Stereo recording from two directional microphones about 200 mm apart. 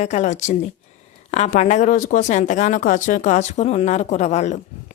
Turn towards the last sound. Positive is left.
turn(degrees=35)  # may be behind; listen again after turning